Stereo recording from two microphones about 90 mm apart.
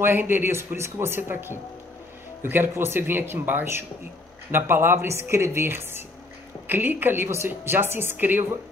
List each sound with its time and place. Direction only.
0.0 s a woman's voice: 25° right (ahead or behind)